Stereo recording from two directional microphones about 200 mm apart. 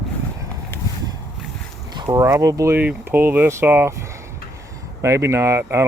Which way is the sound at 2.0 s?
20° right (ahead or behind).